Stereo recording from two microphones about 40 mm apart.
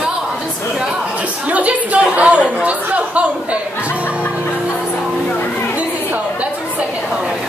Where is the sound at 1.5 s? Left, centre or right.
Right.